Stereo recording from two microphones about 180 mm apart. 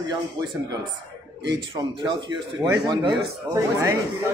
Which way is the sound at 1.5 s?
25° right (ahead or behind).